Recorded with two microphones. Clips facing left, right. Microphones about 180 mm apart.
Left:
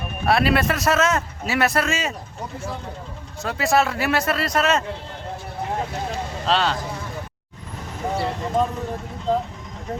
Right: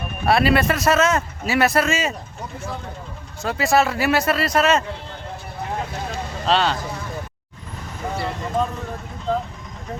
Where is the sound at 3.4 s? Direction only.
Centre (ahead or behind).